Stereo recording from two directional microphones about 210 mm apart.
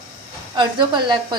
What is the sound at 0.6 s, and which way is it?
Speech, 20° right (ahead or behind).